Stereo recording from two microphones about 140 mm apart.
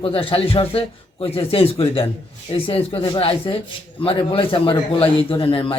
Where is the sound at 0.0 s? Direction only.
40° left (ahead or behind).